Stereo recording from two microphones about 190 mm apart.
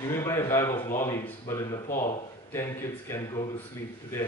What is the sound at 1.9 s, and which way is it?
Speech, 45° left (ahead or behind).